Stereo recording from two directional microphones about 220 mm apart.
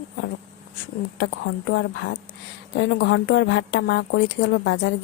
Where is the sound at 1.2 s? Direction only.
50° left (ahead or behind).